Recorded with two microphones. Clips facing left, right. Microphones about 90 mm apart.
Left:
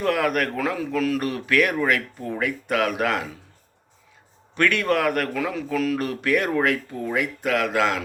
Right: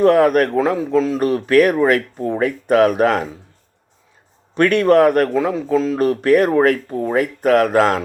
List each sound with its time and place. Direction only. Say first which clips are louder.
0.0 s speech: right 10 dB; 35° right (ahead or behind)
4.5 s speech: right 9 dB; 35° right (ahead or behind)